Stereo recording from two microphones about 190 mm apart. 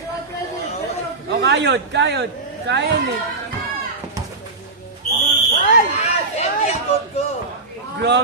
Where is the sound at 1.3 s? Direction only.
65° right (ahead or behind).